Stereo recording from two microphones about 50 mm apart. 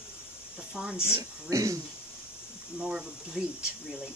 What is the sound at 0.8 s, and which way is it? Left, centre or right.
Speech, centre.